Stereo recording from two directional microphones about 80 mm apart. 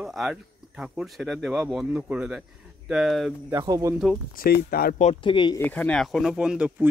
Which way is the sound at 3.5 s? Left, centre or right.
Right.